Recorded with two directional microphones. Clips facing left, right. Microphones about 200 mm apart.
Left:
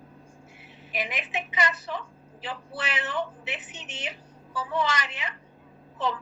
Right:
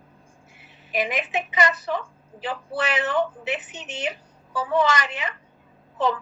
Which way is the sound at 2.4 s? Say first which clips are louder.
Right 7 dB; 45° right (ahead or behind).